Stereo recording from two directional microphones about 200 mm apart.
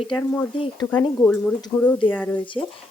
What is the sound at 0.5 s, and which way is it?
Speech, 25° left (ahead or behind).